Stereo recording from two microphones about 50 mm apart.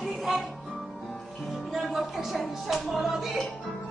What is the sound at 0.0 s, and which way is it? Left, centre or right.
Music, centre.